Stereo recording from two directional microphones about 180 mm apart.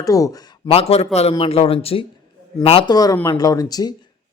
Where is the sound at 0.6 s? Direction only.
35° left (ahead or behind).